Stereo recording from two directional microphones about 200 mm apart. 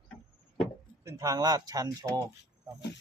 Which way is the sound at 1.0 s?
15° right (ahead or behind).